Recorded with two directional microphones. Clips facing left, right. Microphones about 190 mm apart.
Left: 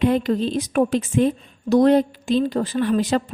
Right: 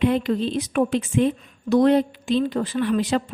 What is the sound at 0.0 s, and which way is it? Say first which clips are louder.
A woman's voice: left 2 dB; 40° left (ahead or behind).